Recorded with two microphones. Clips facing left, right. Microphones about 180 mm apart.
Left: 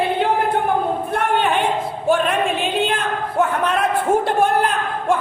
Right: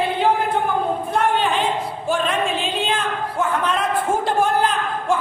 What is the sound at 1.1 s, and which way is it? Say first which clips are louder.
A man's voice: even; 60° left (ahead or behind).